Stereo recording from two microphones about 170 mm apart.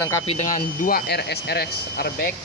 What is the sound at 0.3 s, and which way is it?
Speech, 45° left (ahead or behind).